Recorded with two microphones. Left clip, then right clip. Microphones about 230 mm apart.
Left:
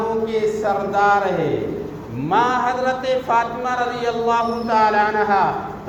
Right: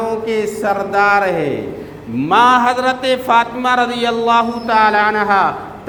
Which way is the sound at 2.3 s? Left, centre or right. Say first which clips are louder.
Right 7 dB; right.